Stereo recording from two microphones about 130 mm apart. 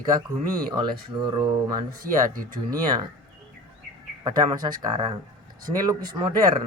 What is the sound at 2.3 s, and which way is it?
Speech, 90° right.